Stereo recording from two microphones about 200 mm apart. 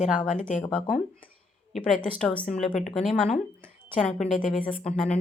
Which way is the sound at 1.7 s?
Centre (ahead or behind).